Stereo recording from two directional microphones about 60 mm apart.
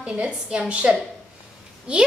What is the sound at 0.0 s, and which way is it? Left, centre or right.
A woman's voice, centre.